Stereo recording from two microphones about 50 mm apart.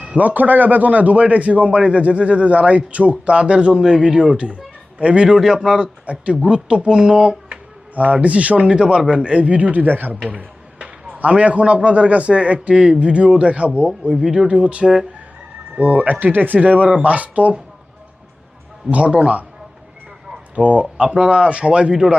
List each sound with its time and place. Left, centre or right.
0.1 s a man's voice: right; by 7.6 s centre
7.9 s a man's voice: right
10.2 s a man's voice: right
15.7 s speech: right
18.9 s a man's voice: right
20.6 s a man's voice: right